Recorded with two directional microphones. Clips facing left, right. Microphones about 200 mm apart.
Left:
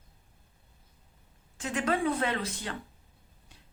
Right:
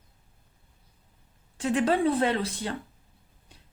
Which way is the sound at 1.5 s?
30° right (ahead or behind).